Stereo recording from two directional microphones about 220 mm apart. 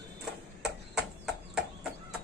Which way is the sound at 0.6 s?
5° right (ahead or behind).